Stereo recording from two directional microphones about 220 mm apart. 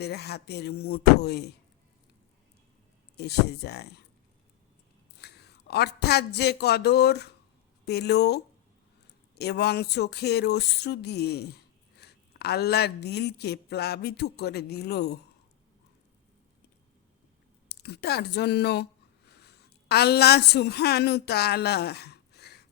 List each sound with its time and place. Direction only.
0.0 s speech: 45° left (ahead or behind)
3.2 s speech: 50° left (ahead or behind)
5.2 s speech: 50° left (ahead or behind)
17.7 s a woman's voice: 50° left (ahead or behind)